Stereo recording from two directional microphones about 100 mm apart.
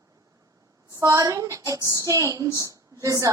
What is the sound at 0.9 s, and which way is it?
A woman's voice, 35° right (ahead or behind).